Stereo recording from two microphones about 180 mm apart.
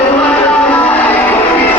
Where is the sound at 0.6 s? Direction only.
10° left (ahead or behind).